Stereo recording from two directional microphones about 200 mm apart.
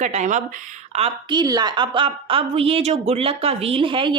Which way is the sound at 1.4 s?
20° right (ahead or behind).